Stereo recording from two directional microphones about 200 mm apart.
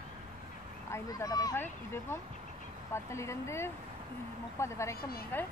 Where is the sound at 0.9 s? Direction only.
20° left (ahead or behind).